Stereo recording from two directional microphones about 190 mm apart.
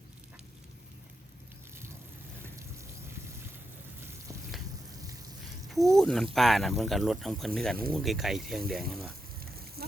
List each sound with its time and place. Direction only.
5.4 s a sound: centre (ahead or behind)
6.3 s speech: centre (ahead or behind)
9.4 s rain on surface: 50° right (ahead or behind)